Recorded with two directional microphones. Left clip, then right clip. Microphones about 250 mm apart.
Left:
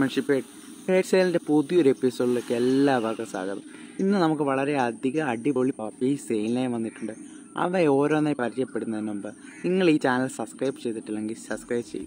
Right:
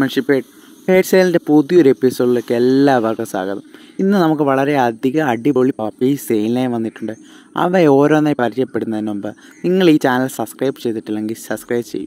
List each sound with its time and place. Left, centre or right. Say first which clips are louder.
0.0 s speech: right 8 dB; right